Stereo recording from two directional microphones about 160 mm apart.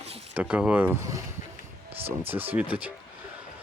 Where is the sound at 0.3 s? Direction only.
10° right (ahead or behind).